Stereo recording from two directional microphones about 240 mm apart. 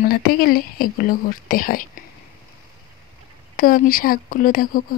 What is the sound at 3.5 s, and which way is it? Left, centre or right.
Speech, left.